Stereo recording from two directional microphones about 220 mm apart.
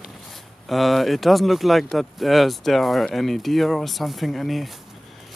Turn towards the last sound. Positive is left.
turn(degrees=0)  # may be behind; listen again after turning